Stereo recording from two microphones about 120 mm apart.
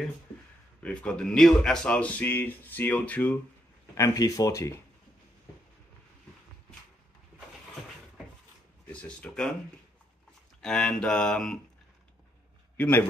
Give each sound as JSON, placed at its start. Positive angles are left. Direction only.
{"t": 0.8, "sound": "speech", "side_deg": 10}
{"t": 3.9, "sound": "speech", "side_deg": 30}
{"t": 8.8, "sound": "speech", "side_deg": 10}
{"t": 10.6, "sound": "speech", "side_deg": 5}
{"t": 12.7, "sound": "a man's voice", "side_deg": 15}